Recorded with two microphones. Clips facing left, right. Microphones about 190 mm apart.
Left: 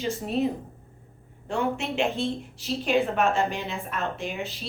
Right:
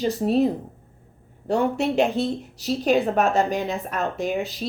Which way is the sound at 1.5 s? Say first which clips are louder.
Right 6 dB; 40° right (ahead or behind).